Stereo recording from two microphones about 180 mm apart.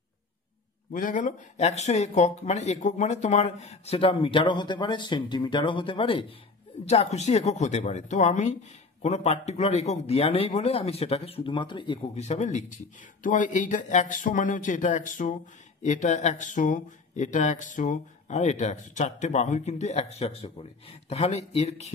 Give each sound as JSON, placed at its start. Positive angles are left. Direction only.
{"t": 0.9, "sound": "a man's voice", "side_deg": 45}